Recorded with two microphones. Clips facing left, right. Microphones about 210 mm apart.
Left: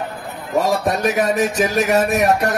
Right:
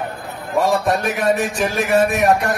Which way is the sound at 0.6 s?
40° left (ahead or behind).